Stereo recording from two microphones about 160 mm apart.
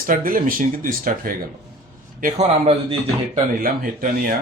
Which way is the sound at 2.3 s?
35° right (ahead or behind).